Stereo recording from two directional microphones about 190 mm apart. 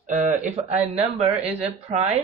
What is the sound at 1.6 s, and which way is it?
Speech, 35° right (ahead or behind).